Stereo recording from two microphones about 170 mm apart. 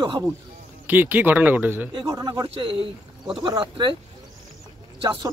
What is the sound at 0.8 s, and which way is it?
Speech, 10° right (ahead or behind).